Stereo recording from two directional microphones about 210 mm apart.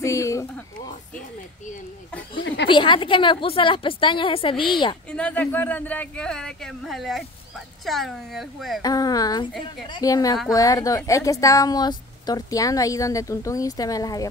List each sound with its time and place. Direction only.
0.0 s speech: 15° left (ahead or behind)
2.7 s a woman's voice: 25° left (ahead or behind)
5.1 s speech: 5° left (ahead or behind)
8.8 s a woman's voice: 15° left (ahead or behind)